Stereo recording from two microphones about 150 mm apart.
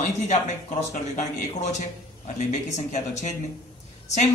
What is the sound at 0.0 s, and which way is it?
Speech, 50° left (ahead or behind).